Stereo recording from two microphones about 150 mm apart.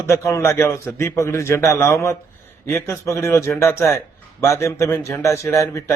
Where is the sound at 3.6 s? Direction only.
20° left (ahead or behind).